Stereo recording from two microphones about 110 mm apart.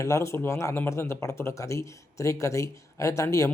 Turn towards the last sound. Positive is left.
turn(degrees=30)  # may be behind; listen again after turning